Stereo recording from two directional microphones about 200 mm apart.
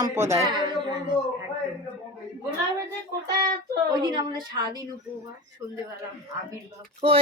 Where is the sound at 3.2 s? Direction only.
20° right (ahead or behind).